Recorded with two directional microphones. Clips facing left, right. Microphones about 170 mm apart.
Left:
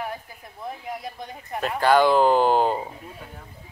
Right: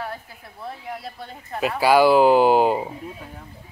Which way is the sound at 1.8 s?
5° right (ahead or behind).